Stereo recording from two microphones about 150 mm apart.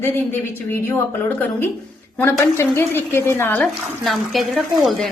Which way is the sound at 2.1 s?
15° left (ahead or behind).